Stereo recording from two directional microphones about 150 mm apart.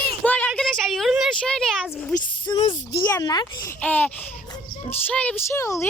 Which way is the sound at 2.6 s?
35° left (ahead or behind).